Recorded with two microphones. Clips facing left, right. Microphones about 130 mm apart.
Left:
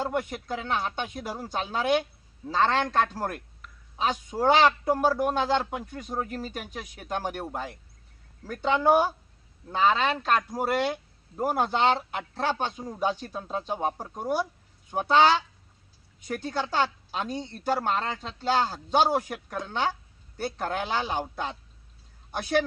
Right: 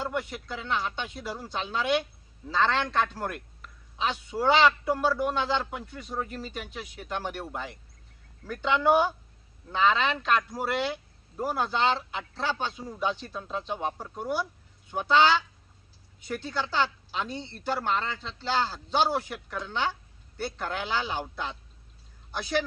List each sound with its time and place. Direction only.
0.0 s a man's voice: 45° left (ahead or behind)